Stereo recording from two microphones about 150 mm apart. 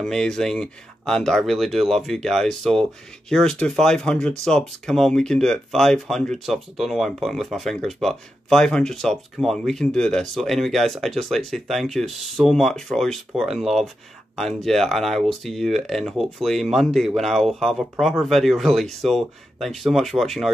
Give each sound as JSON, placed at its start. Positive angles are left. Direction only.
{"t": 0.0, "sound": "speech", "side_deg": 5}